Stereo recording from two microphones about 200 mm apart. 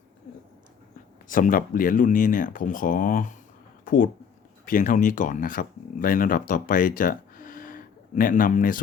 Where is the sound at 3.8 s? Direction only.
45° left (ahead or behind).